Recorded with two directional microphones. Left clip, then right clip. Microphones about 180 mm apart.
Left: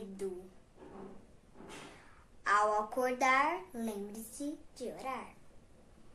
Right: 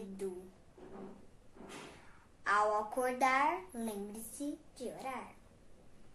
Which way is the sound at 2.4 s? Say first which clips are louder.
Left 2 dB; 20° left (ahead or behind).